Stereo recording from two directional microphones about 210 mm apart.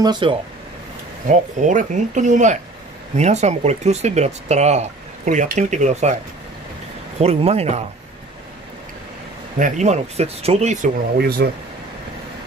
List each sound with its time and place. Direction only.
0.0 s speech: 20° right (ahead or behind)
1.6 s speech: 35° right (ahead or behind)
7.2 s speech: 30° right (ahead or behind)
9.6 s speech: 35° right (ahead or behind)
11.1 s speech: 50° right (ahead or behind)